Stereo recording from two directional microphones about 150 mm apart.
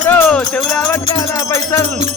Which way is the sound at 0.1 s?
5° left (ahead or behind).